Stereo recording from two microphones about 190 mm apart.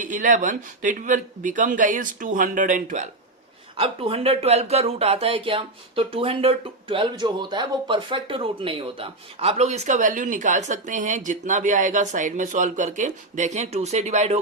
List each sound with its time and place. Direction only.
0.0 s a man's voice: 40° right (ahead or behind)
3.8 s speech: 30° right (ahead or behind)